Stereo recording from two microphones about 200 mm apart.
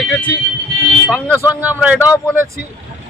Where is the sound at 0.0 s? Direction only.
Centre (ahead or behind).